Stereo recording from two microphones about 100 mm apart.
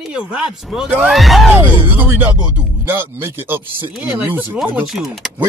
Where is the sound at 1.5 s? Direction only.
20° right (ahead or behind).